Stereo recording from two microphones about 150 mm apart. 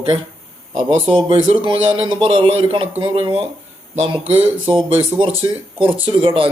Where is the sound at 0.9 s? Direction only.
40° right (ahead or behind).